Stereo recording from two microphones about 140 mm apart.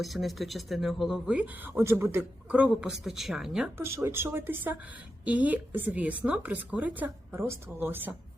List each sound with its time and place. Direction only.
0.0 s speech: centre (ahead or behind)
3.8 s a woman's voice: 20° right (ahead or behind)